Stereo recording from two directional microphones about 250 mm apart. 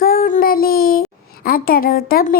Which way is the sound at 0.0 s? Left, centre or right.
Left.